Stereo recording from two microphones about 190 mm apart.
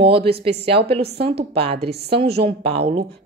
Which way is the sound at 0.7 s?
30° right (ahead or behind).